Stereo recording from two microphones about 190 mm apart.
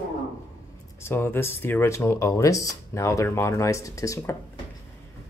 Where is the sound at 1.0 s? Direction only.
10° left (ahead or behind).